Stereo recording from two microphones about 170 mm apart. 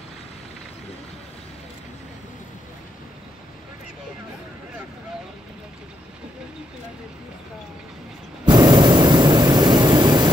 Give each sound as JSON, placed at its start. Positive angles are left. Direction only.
{"t": 8.5, "sound": "vehicle", "side_deg": -25}